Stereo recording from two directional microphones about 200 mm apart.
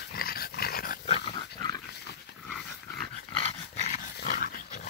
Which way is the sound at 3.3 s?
30° left (ahead or behind).